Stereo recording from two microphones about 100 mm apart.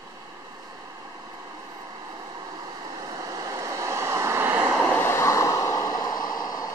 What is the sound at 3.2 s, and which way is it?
Vehicle, 35° right (ahead or behind).